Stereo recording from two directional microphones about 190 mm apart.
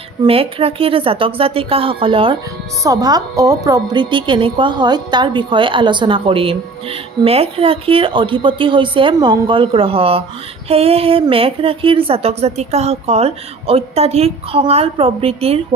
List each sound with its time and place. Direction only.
0.2 s a woman's voice: 30° right (ahead or behind)